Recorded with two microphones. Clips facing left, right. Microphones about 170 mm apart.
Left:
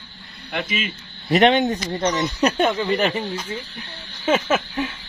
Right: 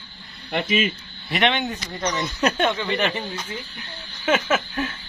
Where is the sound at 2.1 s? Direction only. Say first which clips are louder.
Left 4 dB; 15° left (ahead or behind).